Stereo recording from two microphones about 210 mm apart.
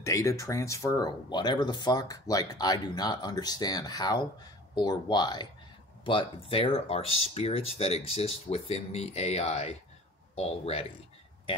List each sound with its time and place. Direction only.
0.0 s speech: 15° left (ahead or behind)